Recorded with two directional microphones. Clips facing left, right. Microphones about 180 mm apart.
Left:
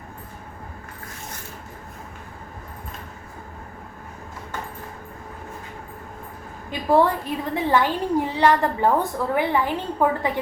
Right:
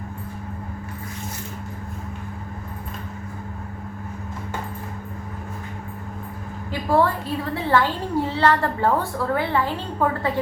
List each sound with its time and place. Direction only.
6.7 s a woman's voice: 20° left (ahead or behind)